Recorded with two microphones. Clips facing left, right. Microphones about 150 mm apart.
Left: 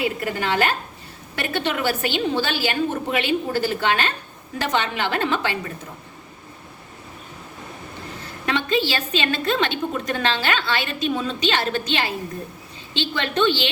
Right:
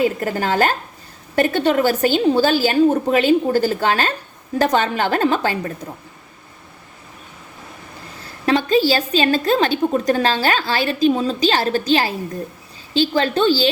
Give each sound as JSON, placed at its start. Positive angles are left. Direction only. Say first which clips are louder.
{"t": 0.0, "sound": "a woman's voice", "louder": "right 5 dB", "side_deg": -40}
{"t": 8.4, "sound": "a woman's voice", "louder": "right 7 dB", "side_deg": -40}